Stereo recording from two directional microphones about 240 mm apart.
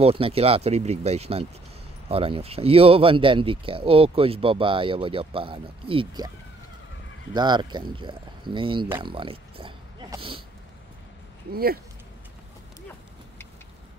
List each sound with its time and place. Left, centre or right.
0.0 s speech: right
7.3 s speech: centre
8.9 s a sound: right
11.5 s speech: right